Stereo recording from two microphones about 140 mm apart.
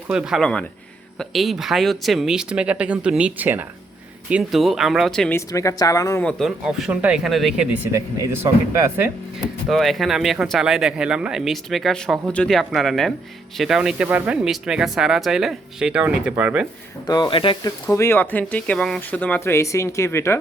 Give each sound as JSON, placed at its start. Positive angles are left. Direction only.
{"t": 0.1, "sound": "speech", "side_deg": -5}
{"t": 5.5, "sound": "speech", "side_deg": 25}
{"t": 6.7, "sound": "speech", "side_deg": -5}
{"t": 7.9, "sound": "speech", "side_deg": -20}
{"t": 9.6, "sound": "speech", "side_deg": 0}
{"t": 17.1, "sound": "speech", "side_deg": 35}
{"t": 17.8, "sound": "speech", "side_deg": 20}